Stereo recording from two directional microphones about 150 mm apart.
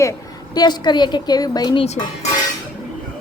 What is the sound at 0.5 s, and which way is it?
A woman's voice, 30° left (ahead or behind).